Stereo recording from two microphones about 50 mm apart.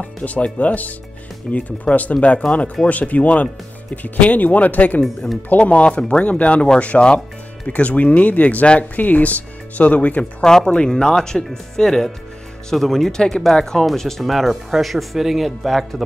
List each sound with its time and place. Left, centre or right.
0.0 s speech: left
5.0 s speech: centre
5.5 s speech: left
10.4 s speech: centre